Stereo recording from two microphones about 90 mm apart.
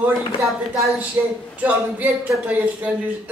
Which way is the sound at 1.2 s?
25° right (ahead or behind).